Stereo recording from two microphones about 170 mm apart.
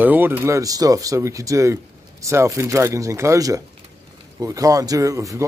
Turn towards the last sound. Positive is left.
turn(degrees=-20)  # may be behind; listen again after turning